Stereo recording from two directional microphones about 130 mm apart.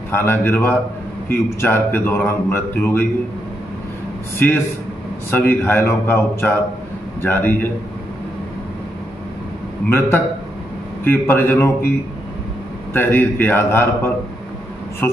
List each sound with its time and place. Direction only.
0.1 s a man's voice: 15° left (ahead or behind)
4.4 s a man's voice: 15° left (ahead or behind)
9.8 s a man's voice: 15° left (ahead or behind)
12.9 s a man's voice: 15° left (ahead or behind)